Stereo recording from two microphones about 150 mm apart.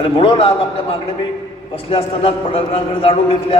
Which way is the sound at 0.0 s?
35° left (ahead or behind).